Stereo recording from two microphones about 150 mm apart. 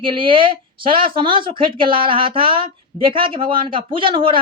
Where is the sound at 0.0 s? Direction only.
35° right (ahead or behind).